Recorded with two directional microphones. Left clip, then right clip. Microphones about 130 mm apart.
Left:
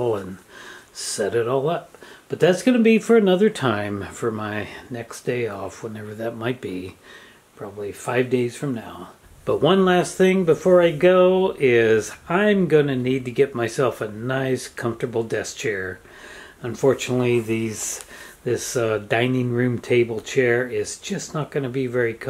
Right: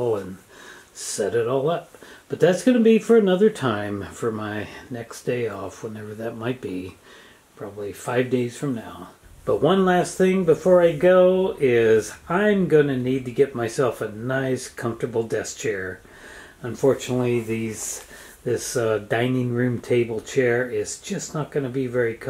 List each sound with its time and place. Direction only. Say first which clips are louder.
0.9 s speech: left 1 dB; 20° left (ahead or behind)
8.0 s speech: left 2 dB; 10° left (ahead or behind)
9.5 s speech: left 1 dB; 20° left (ahead or behind)